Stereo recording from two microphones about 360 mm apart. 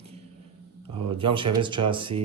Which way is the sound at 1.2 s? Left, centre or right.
Centre.